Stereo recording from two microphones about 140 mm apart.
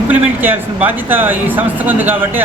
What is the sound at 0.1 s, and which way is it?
A man's voice, 10° right (ahead or behind).